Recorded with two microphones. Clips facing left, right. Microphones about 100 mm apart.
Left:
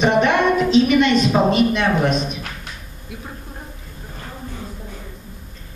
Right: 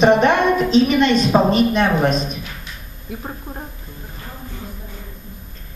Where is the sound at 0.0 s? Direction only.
35° right (ahead or behind).